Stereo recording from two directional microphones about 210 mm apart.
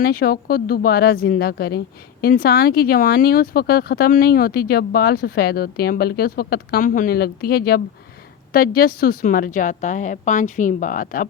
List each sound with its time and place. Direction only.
0.0 s speech: 45° left (ahead or behind)